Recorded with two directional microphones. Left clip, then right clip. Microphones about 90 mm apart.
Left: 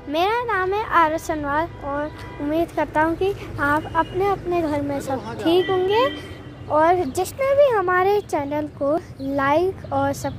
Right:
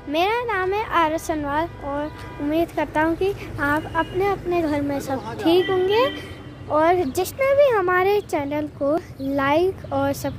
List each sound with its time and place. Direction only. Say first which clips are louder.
0.1 s speech: left 1 dB; 5° right (ahead or behind)
1.3 s speech: left 1 dB; 20° right (ahead or behind)
4.7 s a woman's voice: even; 30° right (ahead or behind)
8.8 s speech: even; 35° right (ahead or behind)